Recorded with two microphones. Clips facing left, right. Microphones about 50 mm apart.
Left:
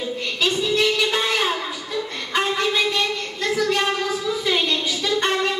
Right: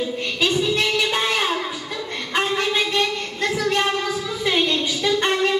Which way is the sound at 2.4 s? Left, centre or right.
Centre.